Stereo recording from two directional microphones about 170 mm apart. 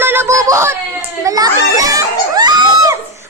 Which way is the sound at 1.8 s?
20° right (ahead or behind).